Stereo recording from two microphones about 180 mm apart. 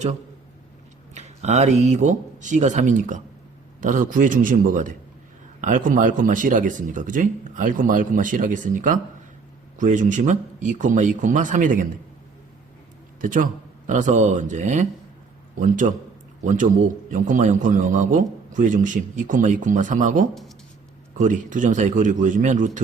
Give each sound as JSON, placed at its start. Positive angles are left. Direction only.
{"t": 1.1, "sound": "a man's voice", "side_deg": -40}
{"t": 13.2, "sound": "a man's voice", "side_deg": -45}